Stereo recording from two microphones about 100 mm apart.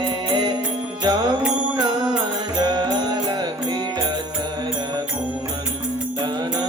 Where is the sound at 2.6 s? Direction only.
45° right (ahead or behind).